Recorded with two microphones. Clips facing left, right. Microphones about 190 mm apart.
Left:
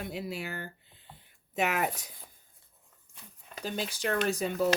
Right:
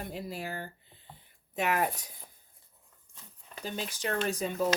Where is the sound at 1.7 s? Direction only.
70° left (ahead or behind).